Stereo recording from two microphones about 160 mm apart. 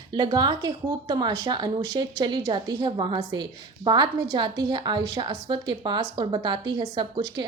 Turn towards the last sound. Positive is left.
turn(degrees=-30)  # may be behind; listen again after turning